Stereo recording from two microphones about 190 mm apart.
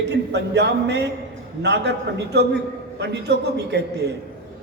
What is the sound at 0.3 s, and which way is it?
A man's voice, 65° right (ahead or behind).